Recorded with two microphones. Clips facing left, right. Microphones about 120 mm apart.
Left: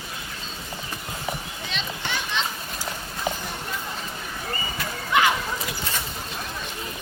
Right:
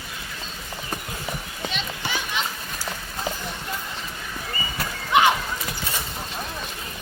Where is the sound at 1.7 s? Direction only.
5° right (ahead or behind).